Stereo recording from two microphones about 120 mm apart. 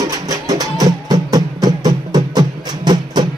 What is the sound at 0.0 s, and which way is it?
Music, 30° right (ahead or behind).